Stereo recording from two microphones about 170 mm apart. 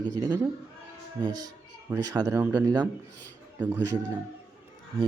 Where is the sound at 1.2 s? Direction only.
20° right (ahead or behind).